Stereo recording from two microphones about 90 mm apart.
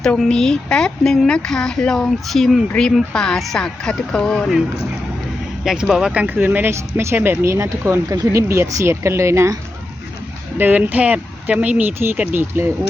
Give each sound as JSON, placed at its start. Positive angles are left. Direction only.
{"t": 0.3, "sound": "speech", "side_deg": 5}
{"t": 5.6, "sound": "speech", "side_deg": -5}
{"t": 6.2, "sound": "speech", "side_deg": -20}
{"t": 10.6, "sound": "speech", "side_deg": -20}